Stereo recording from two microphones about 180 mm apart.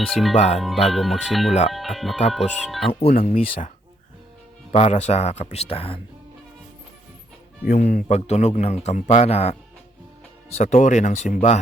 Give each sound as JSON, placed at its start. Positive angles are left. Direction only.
{"t": 0.1, "sound": "speech", "side_deg": 0}
{"t": 0.3, "sound": "speech", "side_deg": 40}
{"t": 0.6, "sound": "speech", "side_deg": 0}
{"t": 3.2, "sound": "speech", "side_deg": 50}
{"t": 4.7, "sound": "speech", "side_deg": 35}
{"t": 7.7, "sound": "speech", "side_deg": 60}
{"t": 8.0, "sound": "speech", "side_deg": 35}
{"t": 10.6, "sound": "speech", "side_deg": 45}